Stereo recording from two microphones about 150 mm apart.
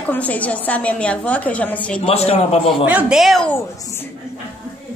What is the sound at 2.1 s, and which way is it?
Speech, 45° left (ahead or behind).